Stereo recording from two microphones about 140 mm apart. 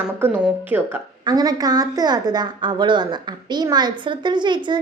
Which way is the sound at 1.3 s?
25° right (ahead or behind).